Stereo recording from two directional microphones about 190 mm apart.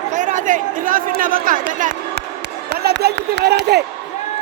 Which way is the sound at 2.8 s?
60° right (ahead or behind).